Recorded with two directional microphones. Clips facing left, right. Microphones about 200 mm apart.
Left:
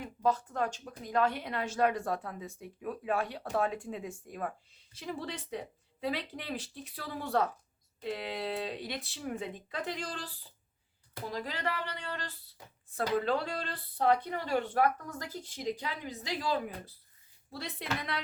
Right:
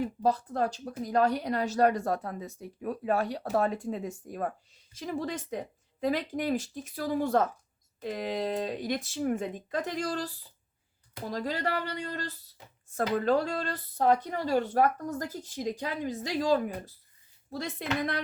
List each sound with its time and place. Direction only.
0.0 s speech: 35° right (ahead or behind)
13.0 s speech: 45° right (ahead or behind)